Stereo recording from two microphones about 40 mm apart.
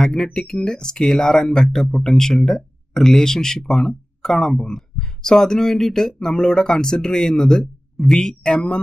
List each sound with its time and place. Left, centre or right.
0.0 s speech: centre